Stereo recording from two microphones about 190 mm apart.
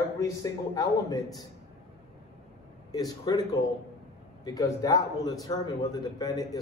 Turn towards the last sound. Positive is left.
turn(degrees=20)  # may be behind; listen again after turning